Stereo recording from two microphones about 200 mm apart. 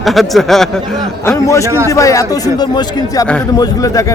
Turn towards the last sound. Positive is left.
turn(degrees=15)  # may be behind; listen again after turning